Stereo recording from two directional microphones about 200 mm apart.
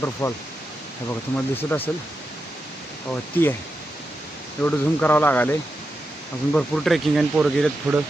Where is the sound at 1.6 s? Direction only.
10° left (ahead or behind).